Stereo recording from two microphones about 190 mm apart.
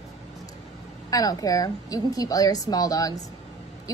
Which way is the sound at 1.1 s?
20° left (ahead or behind).